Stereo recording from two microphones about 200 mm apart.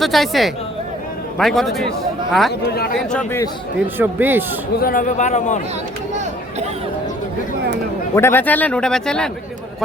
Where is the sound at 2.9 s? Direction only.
10° left (ahead or behind).